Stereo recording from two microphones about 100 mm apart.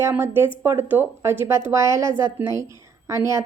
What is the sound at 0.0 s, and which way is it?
Speech, 25° right (ahead or behind).